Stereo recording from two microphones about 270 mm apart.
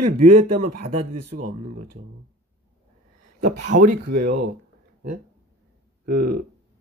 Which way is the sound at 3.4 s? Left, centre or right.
Right.